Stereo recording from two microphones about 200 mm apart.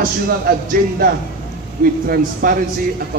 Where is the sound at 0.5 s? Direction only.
50° right (ahead or behind).